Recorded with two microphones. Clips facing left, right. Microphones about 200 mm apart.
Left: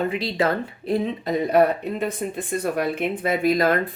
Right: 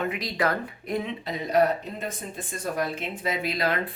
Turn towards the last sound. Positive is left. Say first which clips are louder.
# left 8 dB
turn(degrees=50)  # may be behind; listen again after turning